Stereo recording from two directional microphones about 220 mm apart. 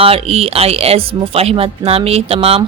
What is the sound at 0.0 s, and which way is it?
Speech, 25° right (ahead or behind).